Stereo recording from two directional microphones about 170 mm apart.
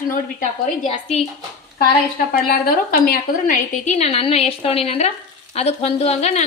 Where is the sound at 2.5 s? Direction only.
60° left (ahead or behind).